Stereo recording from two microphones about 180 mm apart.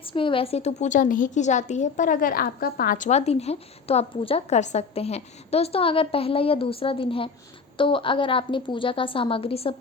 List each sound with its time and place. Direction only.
0.0 s a woman's voice: 30° left (ahead or behind)